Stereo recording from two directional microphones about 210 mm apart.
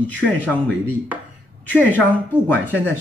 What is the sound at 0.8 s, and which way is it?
Speech, 10° right (ahead or behind).